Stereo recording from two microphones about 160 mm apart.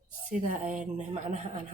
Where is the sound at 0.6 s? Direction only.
50° right (ahead or behind).